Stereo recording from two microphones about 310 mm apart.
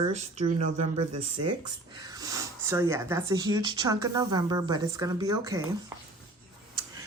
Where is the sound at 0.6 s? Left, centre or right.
Right.